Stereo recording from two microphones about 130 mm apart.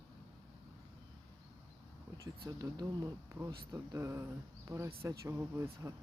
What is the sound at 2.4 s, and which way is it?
Speech, 35° right (ahead or behind).